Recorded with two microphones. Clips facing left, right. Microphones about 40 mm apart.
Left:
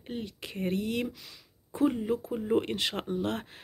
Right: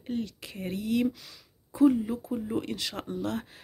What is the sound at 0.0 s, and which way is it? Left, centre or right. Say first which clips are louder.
Speech: right 4 dB; left.